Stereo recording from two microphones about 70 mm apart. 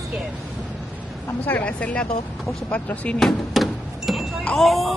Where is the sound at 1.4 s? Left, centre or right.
Left.